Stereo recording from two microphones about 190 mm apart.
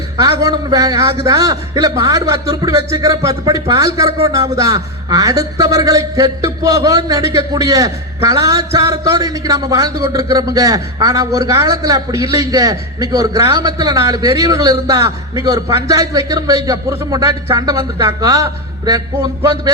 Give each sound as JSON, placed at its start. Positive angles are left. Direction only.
{"t": 0.2, "sound": "a man's voice", "side_deg": -20}